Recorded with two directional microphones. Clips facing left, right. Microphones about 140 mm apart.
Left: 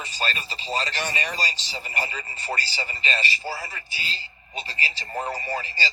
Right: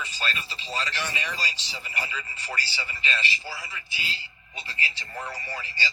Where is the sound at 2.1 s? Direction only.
45° left (ahead or behind).